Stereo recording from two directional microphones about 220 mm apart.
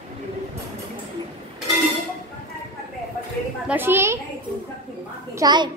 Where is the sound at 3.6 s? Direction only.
10° right (ahead or behind).